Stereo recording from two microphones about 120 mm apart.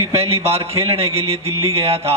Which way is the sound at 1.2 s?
55° right (ahead or behind).